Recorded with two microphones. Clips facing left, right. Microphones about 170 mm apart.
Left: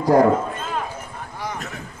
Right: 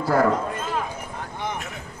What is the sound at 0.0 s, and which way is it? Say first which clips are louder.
Speech: left 5 dB; 15° left (ahead or behind).